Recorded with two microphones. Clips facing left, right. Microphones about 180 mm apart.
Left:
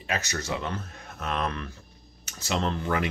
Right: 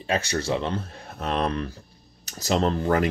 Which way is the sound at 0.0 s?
30° right (ahead or behind).